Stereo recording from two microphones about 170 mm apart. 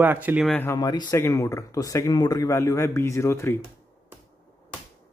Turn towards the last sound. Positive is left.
turn(degrees=15)  # may be behind; listen again after turning